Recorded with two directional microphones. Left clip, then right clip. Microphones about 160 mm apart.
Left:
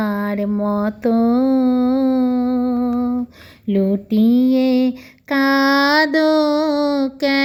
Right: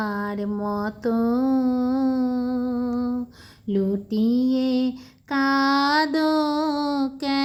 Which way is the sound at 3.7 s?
20° left (ahead or behind).